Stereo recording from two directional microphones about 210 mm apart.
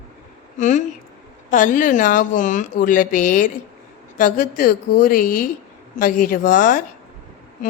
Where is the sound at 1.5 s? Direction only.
40° left (ahead or behind).